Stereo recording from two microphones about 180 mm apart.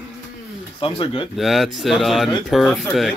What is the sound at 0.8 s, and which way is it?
Speech, 30° left (ahead or behind).